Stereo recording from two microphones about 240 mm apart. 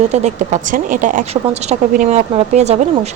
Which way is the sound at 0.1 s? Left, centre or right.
Right.